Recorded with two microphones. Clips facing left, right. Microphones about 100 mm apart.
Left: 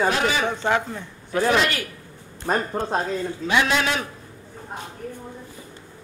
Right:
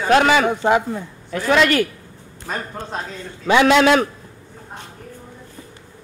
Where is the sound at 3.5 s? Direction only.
90° right.